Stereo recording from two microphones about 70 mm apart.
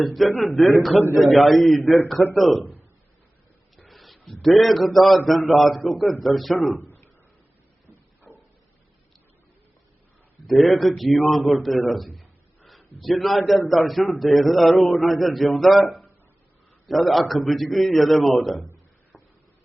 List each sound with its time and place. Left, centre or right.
0.0 s a man's voice: centre
3.8 s a man's voice: centre
7.9 s a sound: left
10.4 s a man's voice: centre